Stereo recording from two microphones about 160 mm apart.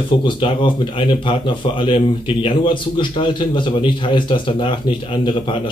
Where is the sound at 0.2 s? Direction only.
30° left (ahead or behind).